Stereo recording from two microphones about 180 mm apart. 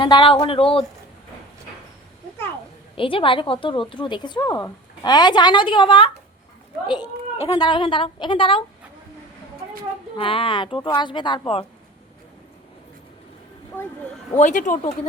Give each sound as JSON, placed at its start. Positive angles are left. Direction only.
{"t": 0.0, "sound": "a woman's voice", "side_deg": 25}
{"t": 3.0, "sound": "a woman's voice", "side_deg": 30}
{"t": 10.2, "sound": "a woman's voice", "side_deg": 30}
{"t": 13.7, "sound": "speech", "side_deg": 10}
{"t": 14.3, "sound": "speech", "side_deg": 45}